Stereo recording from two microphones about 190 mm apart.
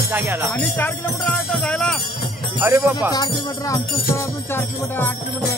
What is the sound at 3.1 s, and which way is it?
Music, 20° left (ahead or behind).